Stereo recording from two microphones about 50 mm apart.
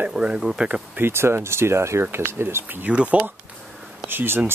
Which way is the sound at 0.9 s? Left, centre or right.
Right.